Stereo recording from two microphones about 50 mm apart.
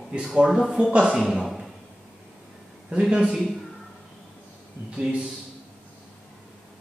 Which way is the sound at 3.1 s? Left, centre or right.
Centre.